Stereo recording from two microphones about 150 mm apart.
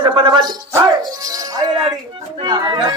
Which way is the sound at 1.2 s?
25° right (ahead or behind).